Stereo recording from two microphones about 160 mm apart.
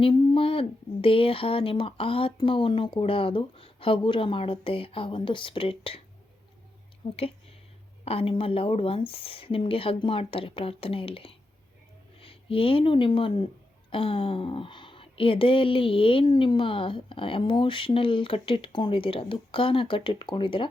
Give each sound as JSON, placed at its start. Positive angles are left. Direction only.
{"t": 0.0, "sound": "speech", "side_deg": 30}
{"t": 7.0, "sound": "speech", "side_deg": 35}